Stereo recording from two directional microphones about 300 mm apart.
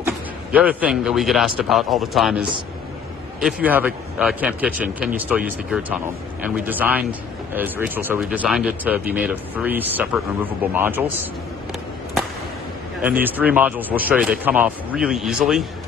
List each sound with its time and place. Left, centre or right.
0.0 s speech: centre
13.0 s speech: centre